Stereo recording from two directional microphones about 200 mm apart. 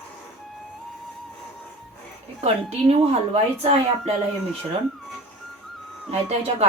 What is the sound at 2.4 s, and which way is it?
A woman's voice, 35° right (ahead or behind).